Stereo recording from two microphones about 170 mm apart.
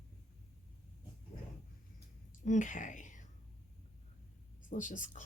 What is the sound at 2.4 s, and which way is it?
Speech, 50° left (ahead or behind).